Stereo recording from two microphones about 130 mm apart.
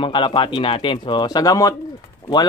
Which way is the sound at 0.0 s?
40° left (ahead or behind).